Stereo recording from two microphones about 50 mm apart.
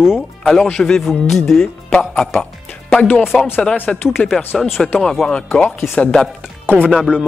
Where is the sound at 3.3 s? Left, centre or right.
Centre.